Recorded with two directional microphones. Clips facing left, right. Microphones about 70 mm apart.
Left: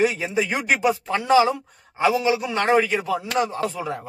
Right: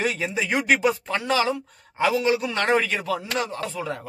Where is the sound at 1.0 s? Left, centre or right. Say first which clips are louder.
Left 5 dB; centre.